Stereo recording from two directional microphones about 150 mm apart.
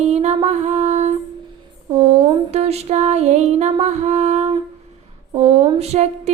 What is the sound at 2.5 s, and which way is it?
Music, 45° right (ahead or behind).